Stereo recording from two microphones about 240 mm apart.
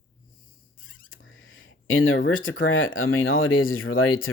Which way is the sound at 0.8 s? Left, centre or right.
Left.